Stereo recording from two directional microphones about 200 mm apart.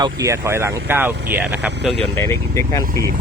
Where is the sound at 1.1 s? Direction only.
55° right (ahead or behind).